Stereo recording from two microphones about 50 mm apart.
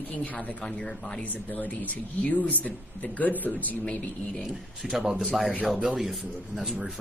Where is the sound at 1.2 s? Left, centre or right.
Left.